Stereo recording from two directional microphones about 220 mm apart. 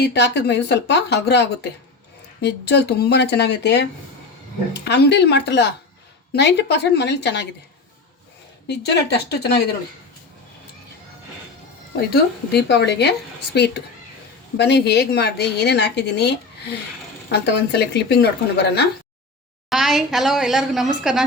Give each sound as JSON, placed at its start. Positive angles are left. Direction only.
{"t": 0.0, "sound": "a woman's voice", "side_deg": 50}
{"t": 8.6, "sound": "a woman's voice", "side_deg": 50}
{"t": 11.9, "sound": "a woman's voice", "side_deg": 50}
{"t": 19.7, "sound": "a woman's voice", "side_deg": 0}